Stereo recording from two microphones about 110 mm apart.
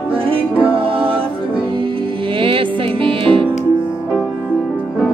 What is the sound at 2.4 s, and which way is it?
Music, 55° right (ahead or behind).